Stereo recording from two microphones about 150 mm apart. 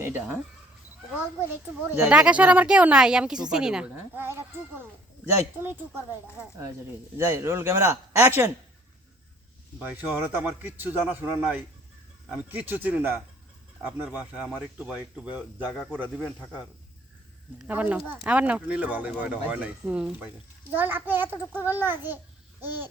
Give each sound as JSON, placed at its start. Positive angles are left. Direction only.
{"t": 0.0, "sound": "speech", "side_deg": -15}
{"t": 1.9, "sound": "speech", "side_deg": -10}
{"t": 7.2, "sound": "speech", "side_deg": -15}
{"t": 9.7, "sound": "speech", "side_deg": -10}
{"t": 17.7, "sound": "speech", "side_deg": -10}